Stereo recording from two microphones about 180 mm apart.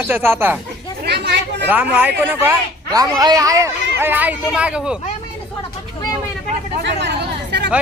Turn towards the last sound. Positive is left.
turn(degrees=-70)  # may be behind; listen again after turning